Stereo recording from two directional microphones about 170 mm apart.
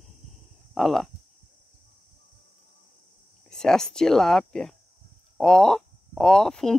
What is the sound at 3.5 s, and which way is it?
Speech, 5° left (ahead or behind).